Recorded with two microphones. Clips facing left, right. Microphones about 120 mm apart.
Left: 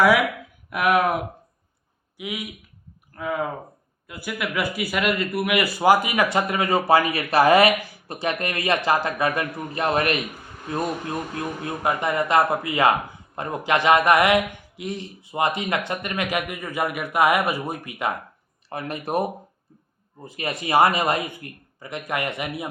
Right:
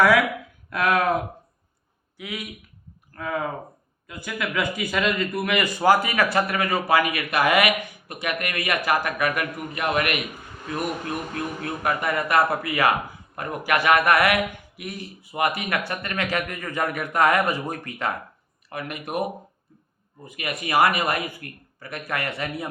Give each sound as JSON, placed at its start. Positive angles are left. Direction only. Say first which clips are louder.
{"t": 0.7, "sound": "speech", "louder": "left 2 dB", "side_deg": 15}
{"t": 2.1, "sound": "a man's voice", "louder": "left 2 dB", "side_deg": 15}
{"t": 11.3, "sound": "a man's voice", "louder": "left 1 dB", "side_deg": 25}
{"t": 18.7, "sound": "speech", "louder": "left 4 dB", "side_deg": 30}
{"t": 20.2, "sound": "a man's voice", "louder": "left 2 dB", "side_deg": 30}